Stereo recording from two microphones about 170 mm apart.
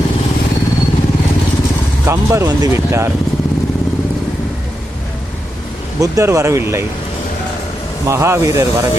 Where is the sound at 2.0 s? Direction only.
15° right (ahead or behind).